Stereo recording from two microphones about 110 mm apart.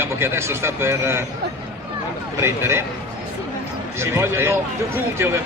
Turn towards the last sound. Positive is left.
turn(degrees=-25)  # may be behind; listen again after turning